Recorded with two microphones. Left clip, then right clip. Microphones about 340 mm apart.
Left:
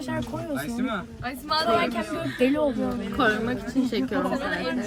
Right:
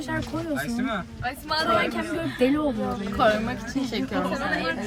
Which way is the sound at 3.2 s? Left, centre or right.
Centre.